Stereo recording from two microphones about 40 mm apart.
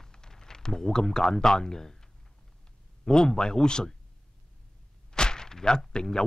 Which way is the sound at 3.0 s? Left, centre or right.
Centre.